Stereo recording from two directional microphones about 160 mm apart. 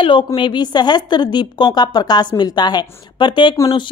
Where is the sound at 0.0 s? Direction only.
30° left (ahead or behind).